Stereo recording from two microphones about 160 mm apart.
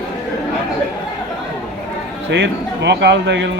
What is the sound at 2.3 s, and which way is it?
A man's voice, 90° right.